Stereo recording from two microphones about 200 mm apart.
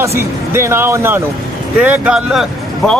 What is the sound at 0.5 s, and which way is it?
Speech, 10° right (ahead or behind).